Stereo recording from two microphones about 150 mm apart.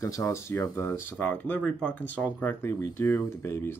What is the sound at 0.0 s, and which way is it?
Speech, 20° left (ahead or behind).